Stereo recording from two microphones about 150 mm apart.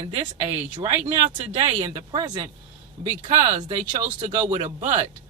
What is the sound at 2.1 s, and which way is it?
Speech, 30° right (ahead or behind).